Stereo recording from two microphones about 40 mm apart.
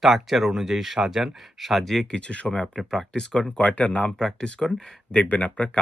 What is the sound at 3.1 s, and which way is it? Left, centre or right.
Speech, centre.